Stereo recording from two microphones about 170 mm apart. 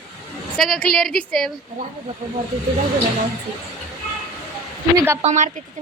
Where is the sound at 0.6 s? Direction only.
Centre (ahead or behind).